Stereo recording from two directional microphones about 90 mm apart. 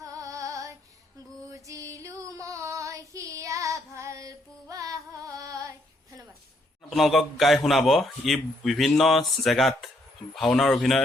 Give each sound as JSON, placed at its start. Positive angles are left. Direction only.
{"t": 0.0, "sound": "female singing", "side_deg": -40}
{"t": 6.9, "sound": "a man's voice", "side_deg": 0}